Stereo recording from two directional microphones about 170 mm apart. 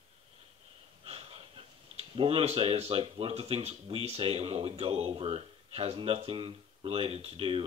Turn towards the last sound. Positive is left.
turn(degrees=-35)  # may be behind; listen again after turning